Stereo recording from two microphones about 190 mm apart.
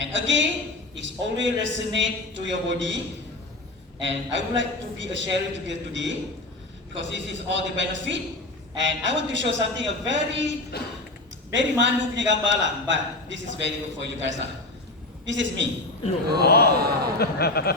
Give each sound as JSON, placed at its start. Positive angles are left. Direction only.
{"t": 0.0, "sound": "a woman's voice", "side_deg": -75}
{"t": 4.0, "sound": "a man's voice", "side_deg": -70}
{"t": 10.7, "sound": "speech", "side_deg": 55}
{"t": 11.5, "sound": "a man's voice", "side_deg": -70}
{"t": 16.4, "sound": "speech", "side_deg": 55}